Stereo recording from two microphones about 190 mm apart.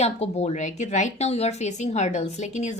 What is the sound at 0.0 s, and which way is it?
Speech, 35° left (ahead or behind).